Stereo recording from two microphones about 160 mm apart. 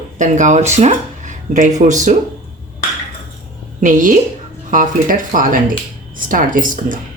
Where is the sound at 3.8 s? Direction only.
55° right (ahead or behind).